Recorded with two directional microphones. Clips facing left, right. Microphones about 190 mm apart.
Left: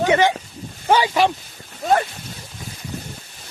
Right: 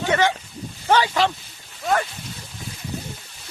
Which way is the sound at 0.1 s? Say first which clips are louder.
Left 3 dB; 15° left (ahead or behind).